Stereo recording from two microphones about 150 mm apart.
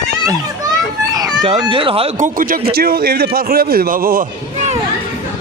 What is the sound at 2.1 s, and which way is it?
Speech, 65° right (ahead or behind).